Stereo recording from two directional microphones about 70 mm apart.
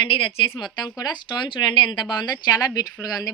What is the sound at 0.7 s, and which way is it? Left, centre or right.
Speech, left.